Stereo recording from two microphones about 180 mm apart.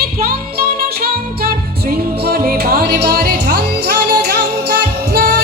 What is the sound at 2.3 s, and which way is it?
Music, 55° right (ahead or behind).